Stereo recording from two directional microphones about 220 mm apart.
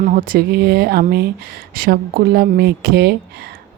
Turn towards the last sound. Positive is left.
turn(degrees=-45)  # may be behind; listen again after turning